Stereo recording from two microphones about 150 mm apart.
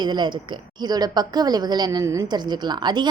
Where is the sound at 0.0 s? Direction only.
30° right (ahead or behind).